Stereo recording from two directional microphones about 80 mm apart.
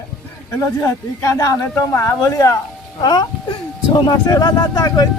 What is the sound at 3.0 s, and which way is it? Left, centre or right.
Speech, left.